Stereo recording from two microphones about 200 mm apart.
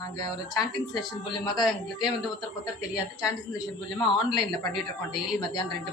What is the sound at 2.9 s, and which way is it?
A woman's voice, 15° left (ahead or behind).